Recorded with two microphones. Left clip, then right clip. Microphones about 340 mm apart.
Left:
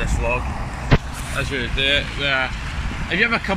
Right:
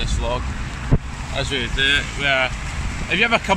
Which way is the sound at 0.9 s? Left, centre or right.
Left.